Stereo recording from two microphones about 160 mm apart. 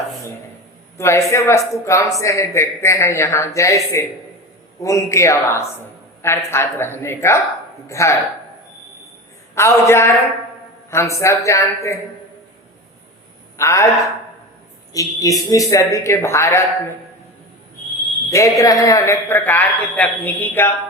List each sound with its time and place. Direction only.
0.9 s a man's voice: 15° left (ahead or behind)
9.6 s a man's voice: 15° left (ahead or behind)
13.6 s a man's voice: 20° left (ahead or behind)
14.9 s a woman's voice: 20° left (ahead or behind)
18.3 s a man's voice: 20° left (ahead or behind)